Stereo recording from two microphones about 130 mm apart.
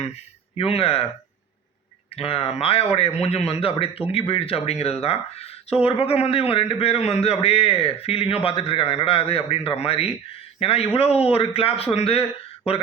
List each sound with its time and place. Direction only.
0.5 s speech: 45° left (ahead or behind)
2.1 s speech: 45° left (ahead or behind)